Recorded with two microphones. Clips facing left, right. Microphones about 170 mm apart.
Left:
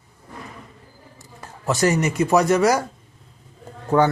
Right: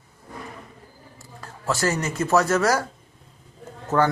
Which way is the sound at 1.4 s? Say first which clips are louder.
Left 4 dB; 20° left (ahead or behind).